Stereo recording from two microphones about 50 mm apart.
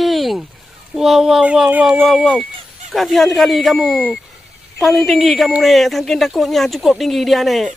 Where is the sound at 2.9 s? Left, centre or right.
Centre.